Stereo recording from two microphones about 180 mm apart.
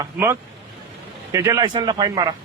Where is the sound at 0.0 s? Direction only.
15° right (ahead or behind).